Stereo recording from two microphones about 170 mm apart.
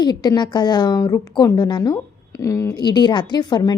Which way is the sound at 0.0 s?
25° left (ahead or behind).